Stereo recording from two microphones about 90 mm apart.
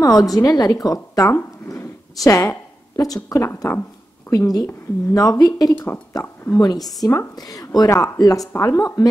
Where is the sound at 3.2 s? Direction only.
40° left (ahead or behind).